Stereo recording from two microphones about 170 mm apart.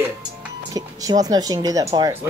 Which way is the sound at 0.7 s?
20° right (ahead or behind).